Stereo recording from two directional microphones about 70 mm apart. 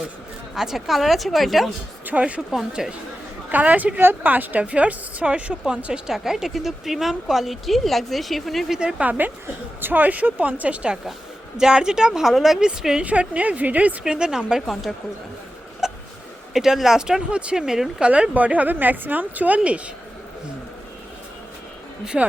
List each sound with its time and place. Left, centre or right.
0.5 s speech: centre
2.0 s speech: centre
2.5 s speech: centre
3.5 s a woman's voice: right; by 8.8 s centre
8.8 s a woman's voice: centre
14.0 s a woman's voice: centre
14.7 s speech: centre
15.8 s a sound: centre
16.5 s a woman's voice: centre
22.0 s a woman's voice: centre